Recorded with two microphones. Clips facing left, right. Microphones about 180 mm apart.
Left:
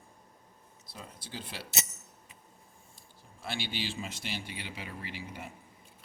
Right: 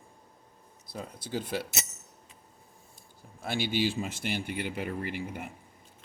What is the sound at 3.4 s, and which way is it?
Speech, 45° right (ahead or behind).